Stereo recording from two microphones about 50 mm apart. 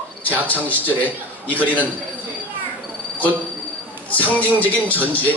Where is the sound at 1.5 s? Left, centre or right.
Left.